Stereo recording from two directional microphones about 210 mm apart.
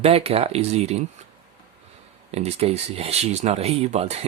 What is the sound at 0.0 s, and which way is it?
Speech, 25° right (ahead or behind).